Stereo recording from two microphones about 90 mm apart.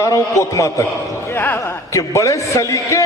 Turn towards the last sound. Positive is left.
turn(degrees=35)  # may be behind; listen again after turning